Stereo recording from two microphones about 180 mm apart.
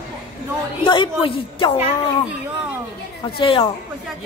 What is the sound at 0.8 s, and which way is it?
A woman's voice, 25° left (ahead or behind).